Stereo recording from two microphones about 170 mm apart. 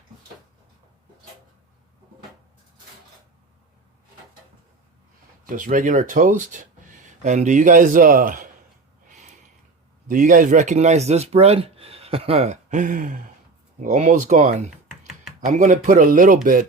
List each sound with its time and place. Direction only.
5.5 s speech: 50° right (ahead or behind)
10.1 s speech: 50° right (ahead or behind)